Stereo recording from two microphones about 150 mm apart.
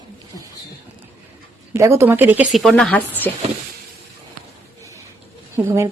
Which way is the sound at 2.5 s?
Centre (ahead or behind).